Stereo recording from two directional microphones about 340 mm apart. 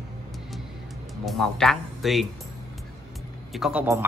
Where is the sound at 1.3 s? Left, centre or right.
Centre.